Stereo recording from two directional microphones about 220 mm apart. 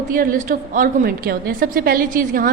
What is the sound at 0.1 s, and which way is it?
A woman's voice, 40° right (ahead or behind).